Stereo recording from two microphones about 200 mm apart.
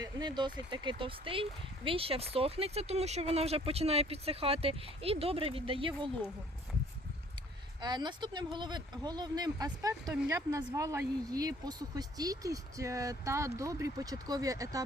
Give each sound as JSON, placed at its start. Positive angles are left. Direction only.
{"t": 0.0, "sound": "speech", "side_deg": -20}
{"t": 7.8, "sound": "speech", "side_deg": -20}